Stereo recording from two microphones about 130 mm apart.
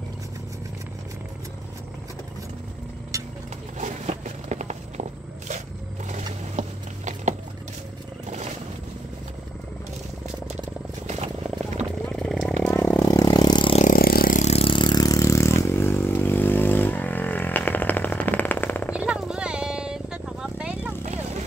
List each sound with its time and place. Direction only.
3.1 s vehicle: 25° right (ahead or behind)
3.7 s a sound: 65° right (ahead or behind)
6.0 s vehicle: 65° right (ahead or behind)
12.1 s a sound: 5° left (ahead or behind)
12.6 s vehicle: 15° left (ahead or behind)
13.1 s vehicle: 30° left (ahead or behind)
13.8 s vehicle: 90° left
14.5 s vehicle: 45° left (ahead or behind); by 18.9 s 15° left (ahead or behind)
18.9 s vehicle: 5° right (ahead or behind)